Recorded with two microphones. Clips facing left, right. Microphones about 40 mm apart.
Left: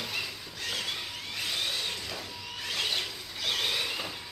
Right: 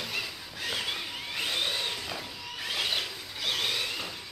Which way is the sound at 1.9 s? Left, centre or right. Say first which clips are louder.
Right 1 dB; centre.